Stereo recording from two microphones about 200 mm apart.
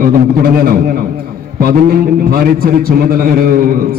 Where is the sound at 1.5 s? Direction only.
45° right (ahead or behind).